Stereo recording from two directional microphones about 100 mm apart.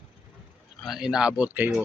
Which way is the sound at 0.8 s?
5° right (ahead or behind).